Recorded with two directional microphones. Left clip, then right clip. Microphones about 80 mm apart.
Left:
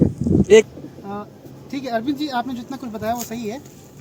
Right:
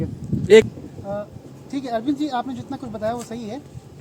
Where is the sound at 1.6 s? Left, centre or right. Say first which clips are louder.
Left 1 dB; right.